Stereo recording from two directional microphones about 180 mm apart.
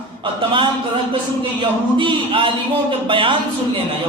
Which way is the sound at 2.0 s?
30° right (ahead or behind).